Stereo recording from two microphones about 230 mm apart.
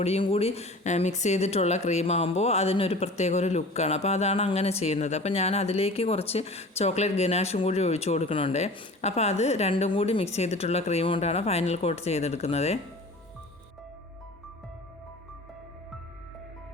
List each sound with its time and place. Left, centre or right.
0.0 s speech: left